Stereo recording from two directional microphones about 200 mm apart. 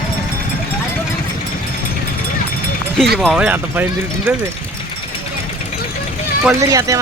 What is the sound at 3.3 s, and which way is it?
Speech, 10° right (ahead or behind).